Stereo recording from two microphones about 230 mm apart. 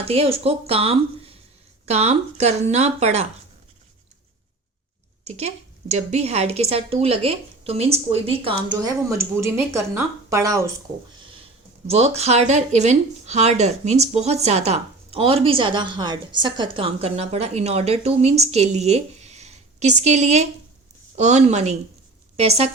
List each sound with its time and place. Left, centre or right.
0.0 s speech: right
5.2 s speech: right; by 10.6 s centre
11.9 s speech: right